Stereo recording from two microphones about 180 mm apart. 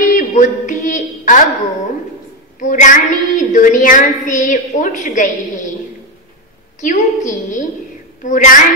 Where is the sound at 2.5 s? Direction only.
45° left (ahead or behind).